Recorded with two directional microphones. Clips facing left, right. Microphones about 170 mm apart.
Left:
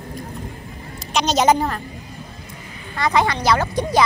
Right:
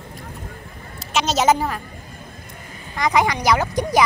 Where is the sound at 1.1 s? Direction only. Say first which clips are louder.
Left 1 dB; 5° right (ahead or behind).